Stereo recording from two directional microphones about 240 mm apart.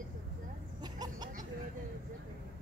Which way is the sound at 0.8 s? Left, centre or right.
Centre.